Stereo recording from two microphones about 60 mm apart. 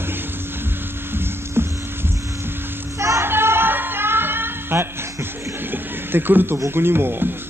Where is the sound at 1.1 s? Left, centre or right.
Right.